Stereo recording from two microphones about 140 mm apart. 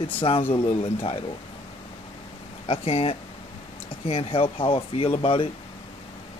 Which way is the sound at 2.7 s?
50° left (ahead or behind).